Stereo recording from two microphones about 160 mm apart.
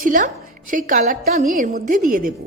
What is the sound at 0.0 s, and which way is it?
A woman's voice, 55° right (ahead or behind).